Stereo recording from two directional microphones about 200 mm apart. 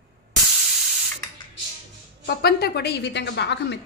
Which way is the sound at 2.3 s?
50° left (ahead or behind).